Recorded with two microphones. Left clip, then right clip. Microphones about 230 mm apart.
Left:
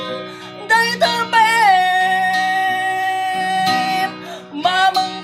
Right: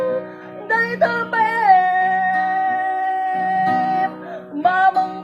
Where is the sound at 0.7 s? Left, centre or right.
Centre.